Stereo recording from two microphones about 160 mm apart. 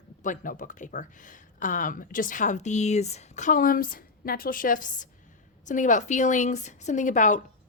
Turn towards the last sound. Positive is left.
turn(degrees=50)  # may be behind; listen again after turning